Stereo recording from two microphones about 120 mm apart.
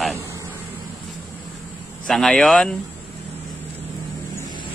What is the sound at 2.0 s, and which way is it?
Speech, 5° left (ahead or behind).